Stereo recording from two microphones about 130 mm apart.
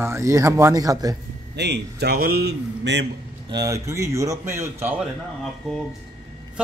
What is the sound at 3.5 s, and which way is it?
A man's voice, 25° right (ahead or behind).